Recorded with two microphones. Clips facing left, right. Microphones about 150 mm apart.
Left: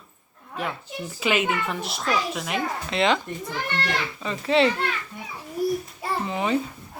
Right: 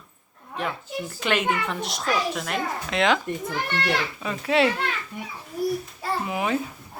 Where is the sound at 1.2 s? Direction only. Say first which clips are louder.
Left 1 dB; 5° left (ahead or behind).